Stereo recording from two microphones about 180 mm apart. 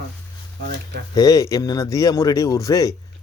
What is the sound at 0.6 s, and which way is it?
Speech, 70° right (ahead or behind).